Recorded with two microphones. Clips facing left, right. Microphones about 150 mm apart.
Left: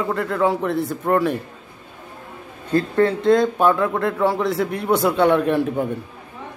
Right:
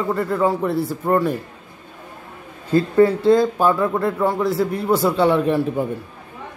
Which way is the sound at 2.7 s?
5° right (ahead or behind).